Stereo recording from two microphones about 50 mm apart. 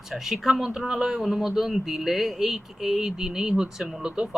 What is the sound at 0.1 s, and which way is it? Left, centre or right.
A man's voice, centre.